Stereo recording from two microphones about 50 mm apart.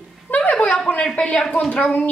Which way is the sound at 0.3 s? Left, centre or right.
Left.